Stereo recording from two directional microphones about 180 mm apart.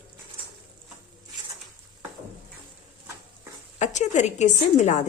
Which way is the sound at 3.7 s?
40° left (ahead or behind).